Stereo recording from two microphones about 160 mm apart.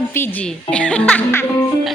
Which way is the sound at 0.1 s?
10° left (ahead or behind).